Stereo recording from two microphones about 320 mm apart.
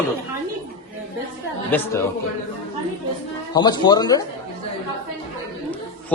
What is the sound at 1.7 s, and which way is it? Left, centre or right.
Speech, centre.